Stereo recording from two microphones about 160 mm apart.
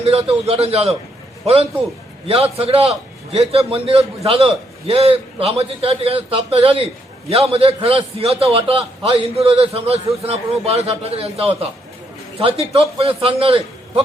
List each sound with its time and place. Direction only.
0.0 s a man's voice: 40° right (ahead or behind)
2.2 s a man's voice: 40° right (ahead or behind)
12.7 s a man's voice: 35° right (ahead or behind)